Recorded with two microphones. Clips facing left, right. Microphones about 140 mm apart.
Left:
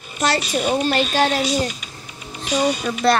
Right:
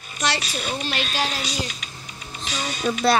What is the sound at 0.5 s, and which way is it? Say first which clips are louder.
Speech: left 9 dB; 55° left (ahead or behind).